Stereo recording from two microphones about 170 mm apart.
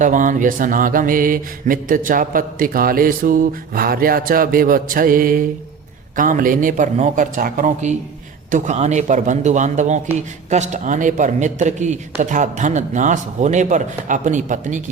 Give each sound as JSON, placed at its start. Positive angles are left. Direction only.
{"t": 0.0, "sound": "mantra", "side_deg": -50}
{"t": 6.1, "sound": "a man's voice", "side_deg": -55}